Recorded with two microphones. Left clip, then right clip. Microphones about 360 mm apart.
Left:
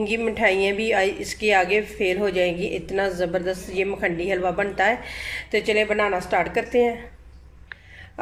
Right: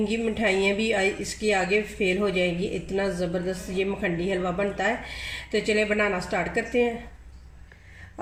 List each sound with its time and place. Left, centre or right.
0.1 s a woman's voice: centre